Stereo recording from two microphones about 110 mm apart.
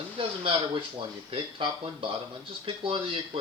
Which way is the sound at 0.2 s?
55° right (ahead or behind).